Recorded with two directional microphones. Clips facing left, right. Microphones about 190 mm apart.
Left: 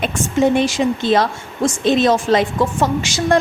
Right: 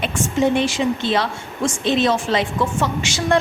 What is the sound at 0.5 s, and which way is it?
A woman's voice, 40° left (ahead or behind).